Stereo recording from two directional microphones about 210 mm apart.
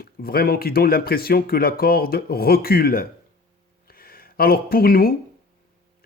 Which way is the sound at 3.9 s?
45° left (ahead or behind).